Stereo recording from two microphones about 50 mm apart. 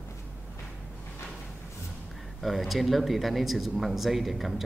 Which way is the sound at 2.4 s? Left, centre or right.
Centre.